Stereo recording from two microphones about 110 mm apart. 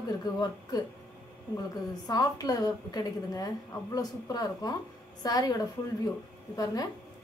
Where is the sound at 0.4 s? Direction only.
35° left (ahead or behind).